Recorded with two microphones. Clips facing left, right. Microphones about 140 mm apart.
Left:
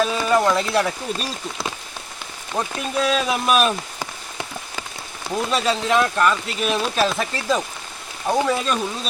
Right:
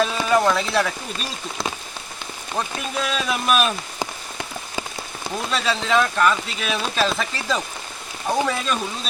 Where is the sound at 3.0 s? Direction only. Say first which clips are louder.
Left 4 dB; centre (ahead or behind).